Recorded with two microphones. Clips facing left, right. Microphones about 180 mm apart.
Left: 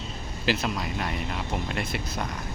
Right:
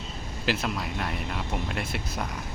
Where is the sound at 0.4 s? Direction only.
Centre (ahead or behind).